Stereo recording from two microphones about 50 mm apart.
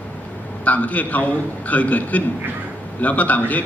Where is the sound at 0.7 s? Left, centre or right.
Left.